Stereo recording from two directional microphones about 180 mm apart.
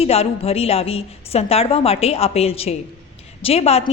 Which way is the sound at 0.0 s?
35° left (ahead or behind).